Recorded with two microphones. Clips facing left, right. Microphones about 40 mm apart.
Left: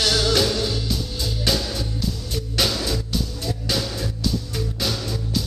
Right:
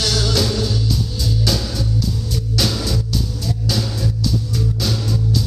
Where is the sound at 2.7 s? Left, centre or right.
Left.